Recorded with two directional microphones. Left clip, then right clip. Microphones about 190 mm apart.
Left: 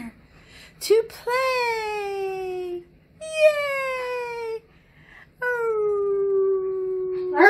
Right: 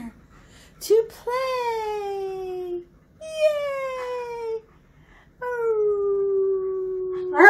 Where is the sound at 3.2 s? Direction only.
10° right (ahead or behind).